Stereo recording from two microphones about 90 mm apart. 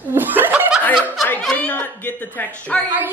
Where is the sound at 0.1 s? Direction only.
20° right (ahead or behind).